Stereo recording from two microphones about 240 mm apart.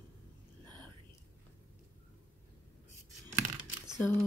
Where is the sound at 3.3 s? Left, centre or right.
Centre.